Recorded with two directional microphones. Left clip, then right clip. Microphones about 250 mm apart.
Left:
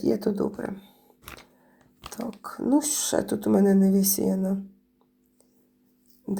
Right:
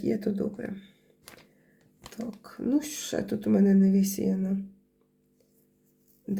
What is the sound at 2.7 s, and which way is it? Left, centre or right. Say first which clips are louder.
Speech: left 5 dB; centre.